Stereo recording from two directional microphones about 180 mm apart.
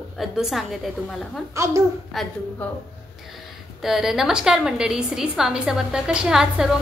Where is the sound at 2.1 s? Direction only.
Centre (ahead or behind).